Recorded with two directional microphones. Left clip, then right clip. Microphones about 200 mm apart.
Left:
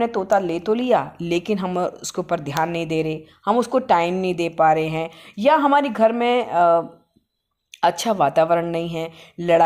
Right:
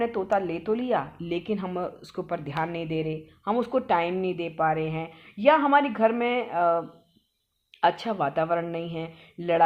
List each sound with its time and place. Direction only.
0.0 s speech: 35° left (ahead or behind)